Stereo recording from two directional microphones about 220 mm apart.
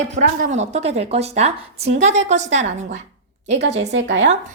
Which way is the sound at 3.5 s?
50° right (ahead or behind).